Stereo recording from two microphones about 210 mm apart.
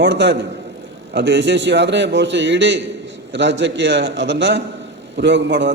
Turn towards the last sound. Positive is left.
turn(degrees=-60)  # may be behind; listen again after turning